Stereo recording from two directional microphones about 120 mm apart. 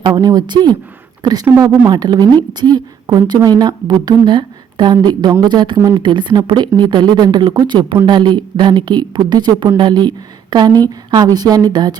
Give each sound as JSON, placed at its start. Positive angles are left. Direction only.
{"t": 0.0, "sound": "a woman's voice", "side_deg": -35}